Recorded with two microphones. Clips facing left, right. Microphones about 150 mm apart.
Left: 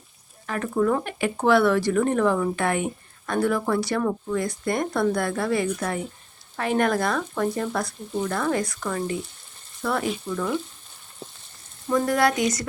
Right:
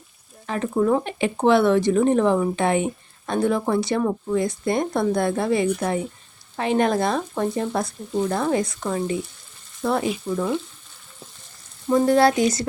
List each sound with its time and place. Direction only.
0.4 s speech: 25° right (ahead or behind)
11.9 s speech: 25° right (ahead or behind)